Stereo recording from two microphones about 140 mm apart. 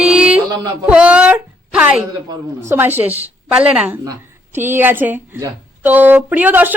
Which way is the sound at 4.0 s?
20° right (ahead or behind).